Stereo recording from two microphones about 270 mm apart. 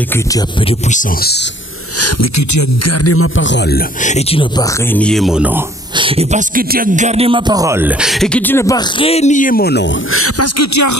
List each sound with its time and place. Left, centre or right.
0.7 s speech: left
2.0 s speech: left; by 4.6 s centre
4.9 s music: centre
5.9 s music: right; by 9.8 s left
10.1 s speech: left